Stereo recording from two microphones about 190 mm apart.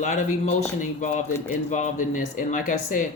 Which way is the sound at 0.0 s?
40° left (ahead or behind).